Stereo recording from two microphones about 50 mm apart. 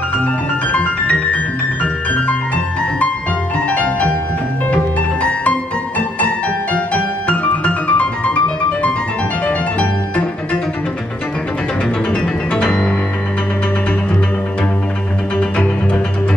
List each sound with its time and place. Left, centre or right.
0.7 s music: left
2.2 s music: left
5.2 s music: left
9.5 s music: left
12.5 s music: centre
15.3 s music: left